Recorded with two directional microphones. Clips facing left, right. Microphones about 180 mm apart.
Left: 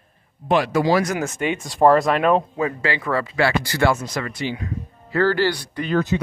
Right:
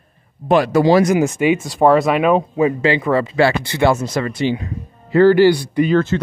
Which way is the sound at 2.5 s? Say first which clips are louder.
Right 8 dB; 20° right (ahead or behind).